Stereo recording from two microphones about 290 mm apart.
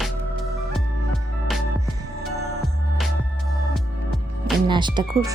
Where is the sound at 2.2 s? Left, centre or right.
Centre.